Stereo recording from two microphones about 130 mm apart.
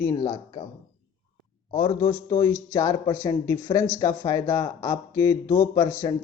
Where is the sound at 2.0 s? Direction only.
25° left (ahead or behind).